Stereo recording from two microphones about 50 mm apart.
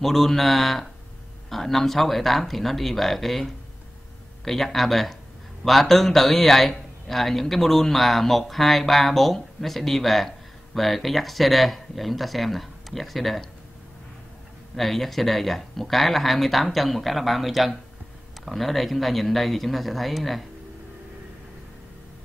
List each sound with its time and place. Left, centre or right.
0.0 s a man's voice: centre
14.8 s a man's voice: centre